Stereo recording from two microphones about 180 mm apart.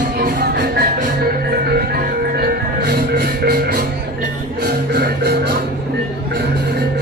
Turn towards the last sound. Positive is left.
turn(degrees=-65)  # may be behind; listen again after turning